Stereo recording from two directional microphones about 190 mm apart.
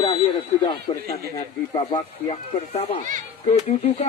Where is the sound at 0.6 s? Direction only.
15° left (ahead or behind).